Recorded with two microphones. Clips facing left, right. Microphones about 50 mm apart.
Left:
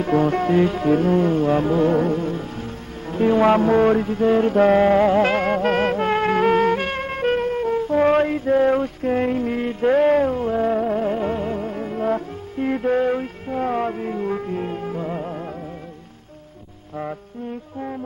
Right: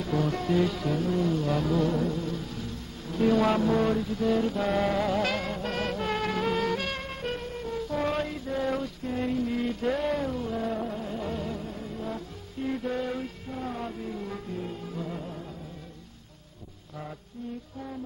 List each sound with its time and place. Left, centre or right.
0.0 s music: left